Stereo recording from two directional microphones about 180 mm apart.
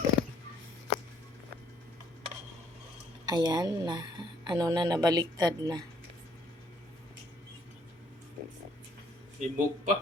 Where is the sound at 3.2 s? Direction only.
20° right (ahead or behind).